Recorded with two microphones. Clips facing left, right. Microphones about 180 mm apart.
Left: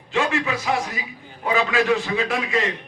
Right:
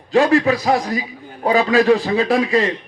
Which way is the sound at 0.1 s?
35° right (ahead or behind).